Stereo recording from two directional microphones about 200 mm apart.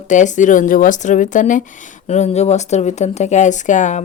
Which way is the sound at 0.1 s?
40° left (ahead or behind).